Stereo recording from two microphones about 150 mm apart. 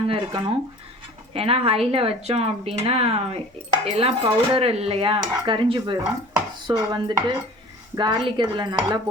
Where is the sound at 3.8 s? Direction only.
40° right (ahead or behind).